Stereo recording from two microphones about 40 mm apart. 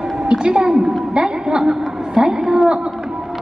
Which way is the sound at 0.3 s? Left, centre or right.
Right.